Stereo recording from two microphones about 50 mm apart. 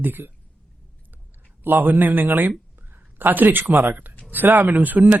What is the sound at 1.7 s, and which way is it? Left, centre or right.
Speech, right.